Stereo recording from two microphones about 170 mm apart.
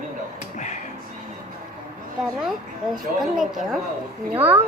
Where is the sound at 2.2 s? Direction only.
Centre (ahead or behind).